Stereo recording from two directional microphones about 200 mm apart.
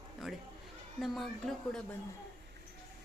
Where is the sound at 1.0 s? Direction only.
Centre (ahead or behind).